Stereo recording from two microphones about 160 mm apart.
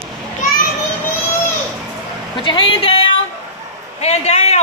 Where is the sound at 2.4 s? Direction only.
30° left (ahead or behind).